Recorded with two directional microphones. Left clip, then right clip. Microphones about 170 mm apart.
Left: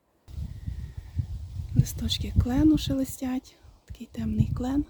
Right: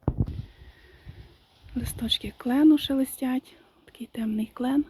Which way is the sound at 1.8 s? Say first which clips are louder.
Right 7 dB; 5° left (ahead or behind).